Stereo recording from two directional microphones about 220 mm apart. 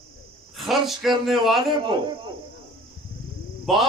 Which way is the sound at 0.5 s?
Centre (ahead or behind).